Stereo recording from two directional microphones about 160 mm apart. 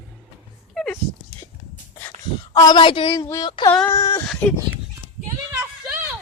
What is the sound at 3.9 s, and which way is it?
Speech, 20° left (ahead or behind).